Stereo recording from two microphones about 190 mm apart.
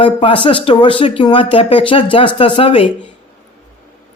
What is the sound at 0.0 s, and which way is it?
Speech, 25° left (ahead or behind).